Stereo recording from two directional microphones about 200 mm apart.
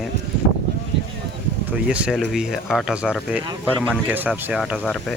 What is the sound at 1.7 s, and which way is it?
Speech, 5° right (ahead or behind).